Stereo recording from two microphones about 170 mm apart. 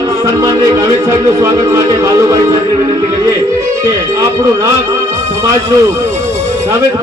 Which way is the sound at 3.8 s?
20° right (ahead or behind).